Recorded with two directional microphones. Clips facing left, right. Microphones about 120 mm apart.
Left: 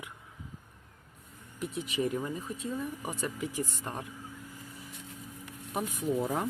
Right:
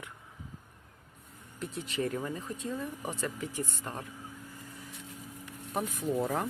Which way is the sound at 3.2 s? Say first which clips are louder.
Left 3 dB; 15° left (ahead or behind).